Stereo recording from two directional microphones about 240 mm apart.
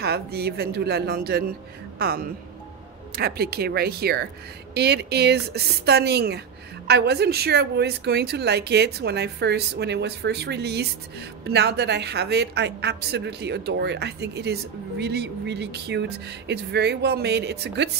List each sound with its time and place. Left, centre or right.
0.0 s speech: right